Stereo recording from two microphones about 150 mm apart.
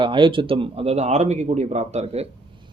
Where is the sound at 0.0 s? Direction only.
35° right (ahead or behind).